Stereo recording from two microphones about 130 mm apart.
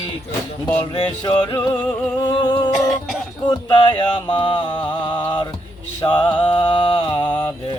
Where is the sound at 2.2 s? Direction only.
35° left (ahead or behind).